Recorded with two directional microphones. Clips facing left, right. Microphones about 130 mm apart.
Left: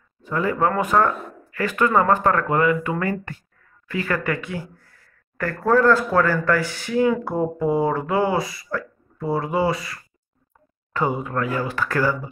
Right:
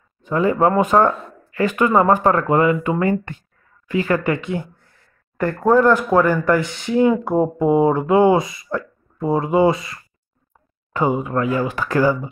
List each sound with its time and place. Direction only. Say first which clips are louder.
0.2 s speech: right 5 dB; 20° right (ahead or behind)